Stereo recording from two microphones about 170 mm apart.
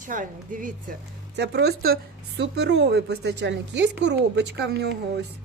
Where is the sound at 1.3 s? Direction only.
80° right.